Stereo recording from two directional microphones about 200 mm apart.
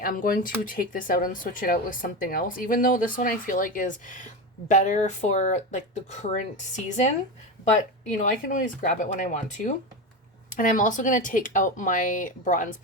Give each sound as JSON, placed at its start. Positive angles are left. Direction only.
{"t": 0.0, "sound": "speech", "side_deg": 45}